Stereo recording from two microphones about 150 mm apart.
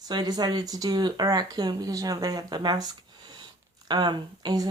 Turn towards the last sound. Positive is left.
turn(degrees=-25)  # may be behind; listen again after turning